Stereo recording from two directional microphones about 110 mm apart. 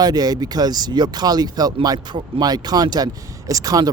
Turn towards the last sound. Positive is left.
turn(degrees=-35)  # may be behind; listen again after turning